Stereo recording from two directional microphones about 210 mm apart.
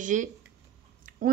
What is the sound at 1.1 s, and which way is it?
Chewing, 40° right (ahead or behind).